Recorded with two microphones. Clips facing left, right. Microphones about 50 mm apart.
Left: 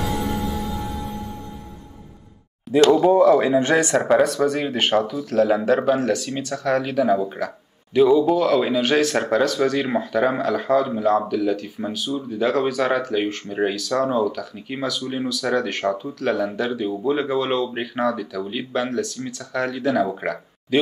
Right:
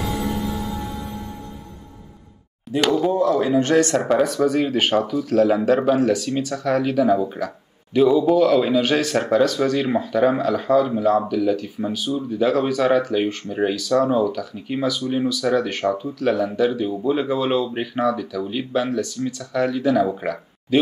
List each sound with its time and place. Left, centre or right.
3.1 s speech: left
3.5 s speech: left
5.3 s speech: centre